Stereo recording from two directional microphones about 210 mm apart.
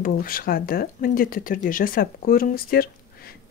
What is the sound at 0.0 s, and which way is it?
Speech, 45° left (ahead or behind).